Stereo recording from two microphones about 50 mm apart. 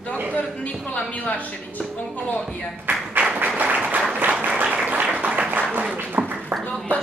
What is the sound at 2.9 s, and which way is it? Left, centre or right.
Tap, right.